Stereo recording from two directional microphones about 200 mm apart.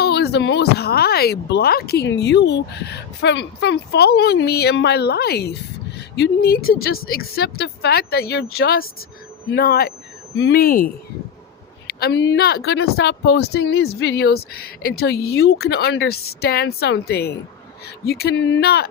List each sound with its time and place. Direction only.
0.0 s speech: 55° left (ahead or behind)